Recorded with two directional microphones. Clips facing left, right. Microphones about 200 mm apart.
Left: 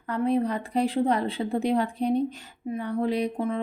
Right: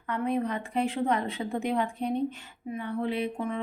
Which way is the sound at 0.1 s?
35° left (ahead or behind).